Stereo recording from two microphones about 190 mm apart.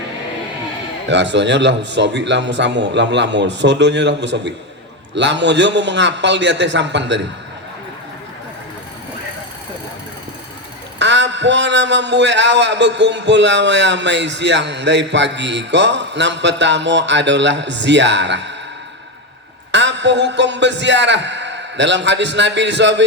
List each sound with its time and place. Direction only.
1.0 s a man's voice: 70° right (ahead or behind)
11.0 s a man's voice: 70° right (ahead or behind)
19.7 s a man's voice: 70° right (ahead or behind)